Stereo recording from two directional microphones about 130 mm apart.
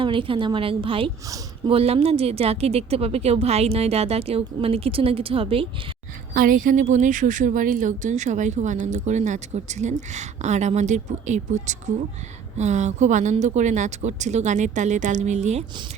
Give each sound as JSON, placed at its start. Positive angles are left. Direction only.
{"t": 0.0, "sound": "a woman's voice", "side_deg": -40}
{"t": 6.3, "sound": "a woman's voice", "side_deg": -90}